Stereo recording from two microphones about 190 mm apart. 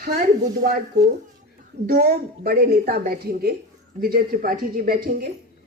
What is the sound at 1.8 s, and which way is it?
Speech, 50° right (ahead or behind).